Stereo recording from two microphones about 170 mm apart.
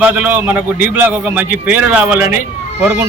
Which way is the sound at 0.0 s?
10° right (ahead or behind).